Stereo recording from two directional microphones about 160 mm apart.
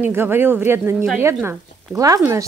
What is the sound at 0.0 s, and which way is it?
Speech, 15° right (ahead or behind).